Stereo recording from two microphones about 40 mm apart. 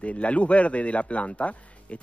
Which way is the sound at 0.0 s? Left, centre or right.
Left.